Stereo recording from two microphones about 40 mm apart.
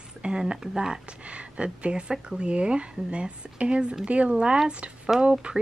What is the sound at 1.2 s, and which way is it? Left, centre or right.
Speech, right.